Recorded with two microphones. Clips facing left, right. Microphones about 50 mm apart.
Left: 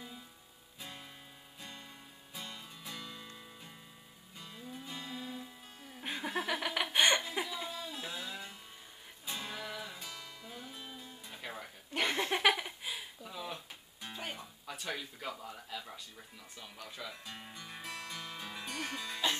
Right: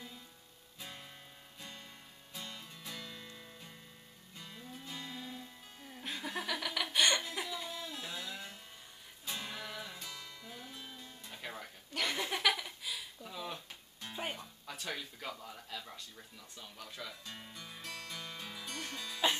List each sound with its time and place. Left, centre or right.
0.7 s music: centre
6.0 s laughter: centre
7.7 s music: centre
11.9 s a sound: left
13.2 s a sound: centre
14.3 s speech: centre
17.8 s music: centre